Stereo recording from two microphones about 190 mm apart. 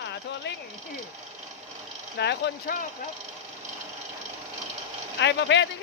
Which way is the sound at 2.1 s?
60° left (ahead or behind).